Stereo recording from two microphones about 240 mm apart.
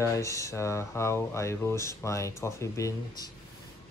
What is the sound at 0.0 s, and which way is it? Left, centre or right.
Speech, centre.